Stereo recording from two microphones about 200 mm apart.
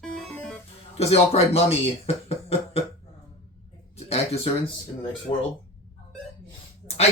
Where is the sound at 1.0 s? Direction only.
30° left (ahead or behind).